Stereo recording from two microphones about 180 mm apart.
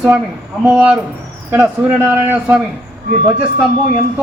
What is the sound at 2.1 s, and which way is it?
Speech, 10° right (ahead or behind).